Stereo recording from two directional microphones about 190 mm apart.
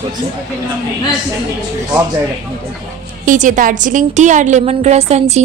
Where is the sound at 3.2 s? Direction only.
45° right (ahead or behind).